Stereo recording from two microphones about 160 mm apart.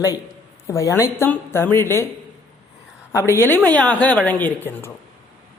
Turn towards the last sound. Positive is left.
turn(degrees=10)  # may be behind; listen again after turning